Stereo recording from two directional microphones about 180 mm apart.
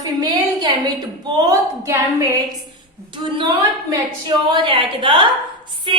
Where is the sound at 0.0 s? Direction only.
20° right (ahead or behind).